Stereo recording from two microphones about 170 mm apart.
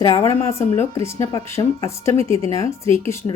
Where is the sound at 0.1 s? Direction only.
15° left (ahead or behind).